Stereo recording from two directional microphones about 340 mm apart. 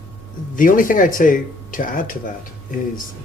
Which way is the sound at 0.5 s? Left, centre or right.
Left.